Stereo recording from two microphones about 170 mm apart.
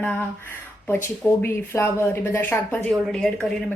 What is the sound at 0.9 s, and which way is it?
A woman's voice, 15° left (ahead or behind).